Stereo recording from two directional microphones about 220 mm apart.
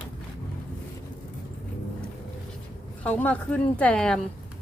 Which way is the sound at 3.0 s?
5° left (ahead or behind).